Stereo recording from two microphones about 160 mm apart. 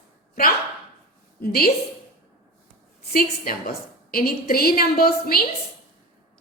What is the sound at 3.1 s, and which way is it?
A woman's voice, 65° left (ahead or behind).